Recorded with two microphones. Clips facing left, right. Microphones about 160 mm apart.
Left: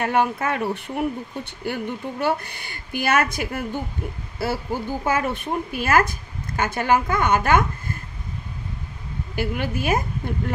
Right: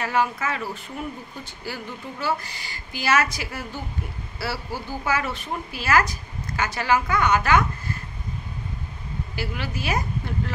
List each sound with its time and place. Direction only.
0.0 s a woman's voice: 55° left (ahead or behind)
9.3 s a woman's voice: 50° left (ahead or behind)